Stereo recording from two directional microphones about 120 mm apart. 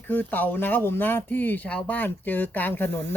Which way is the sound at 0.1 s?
15° left (ahead or behind).